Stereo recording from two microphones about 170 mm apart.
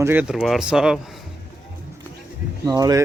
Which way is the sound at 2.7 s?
20° right (ahead or behind).